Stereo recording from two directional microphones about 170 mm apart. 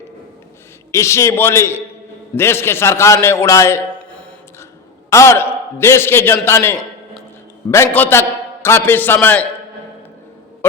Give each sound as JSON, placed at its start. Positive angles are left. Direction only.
{"t": 0.9, "sound": "a man's voice", "side_deg": 15}